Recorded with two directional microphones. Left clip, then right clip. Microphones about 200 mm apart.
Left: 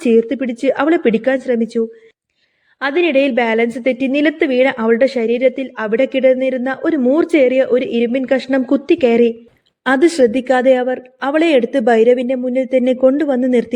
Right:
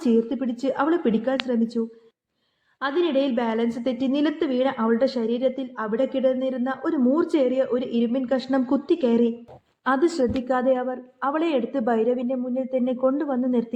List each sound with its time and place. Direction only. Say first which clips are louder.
0.0 s a woman's voice: left 9 dB; 30° left (ahead or behind)
2.8 s a woman's voice: left 9 dB; 30° left (ahead or behind)